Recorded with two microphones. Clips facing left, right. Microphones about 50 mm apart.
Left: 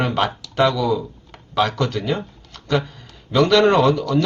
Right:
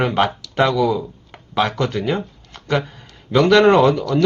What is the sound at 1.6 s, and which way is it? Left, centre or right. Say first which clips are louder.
Speech: right 1 dB; centre.